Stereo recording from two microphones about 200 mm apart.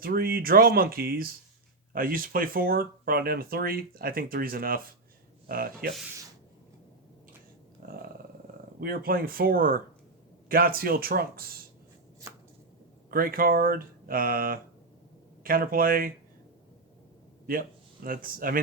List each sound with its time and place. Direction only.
0.0 s speech: 50° right (ahead or behind)
7.8 s a sound: 45° right (ahead or behind)
8.8 s speech: 50° right (ahead or behind)
13.1 s speech: 45° right (ahead or behind)
17.4 s speech: 45° right (ahead or behind)